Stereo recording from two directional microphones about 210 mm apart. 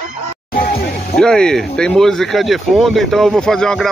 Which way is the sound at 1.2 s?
5° left (ahead or behind).